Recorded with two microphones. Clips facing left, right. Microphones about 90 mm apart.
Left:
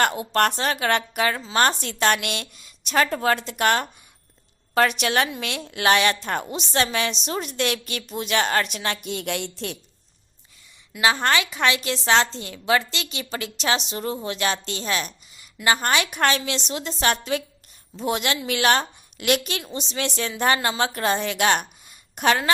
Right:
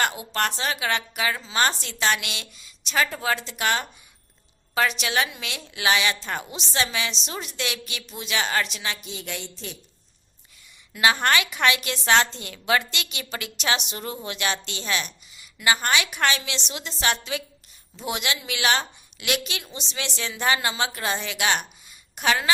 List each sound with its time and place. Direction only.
0.0 s a woman's voice: 45° left (ahead or behind); by 9.7 s 65° left (ahead or behind)
11.0 s a woman's voice: 25° left (ahead or behind); by 22.5 s 45° left (ahead or behind)